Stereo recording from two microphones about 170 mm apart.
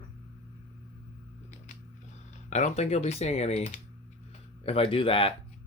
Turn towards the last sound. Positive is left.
turn(degrees=30)  # may be behind; listen again after turning